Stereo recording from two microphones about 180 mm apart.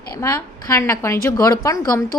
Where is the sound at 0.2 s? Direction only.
15° left (ahead or behind).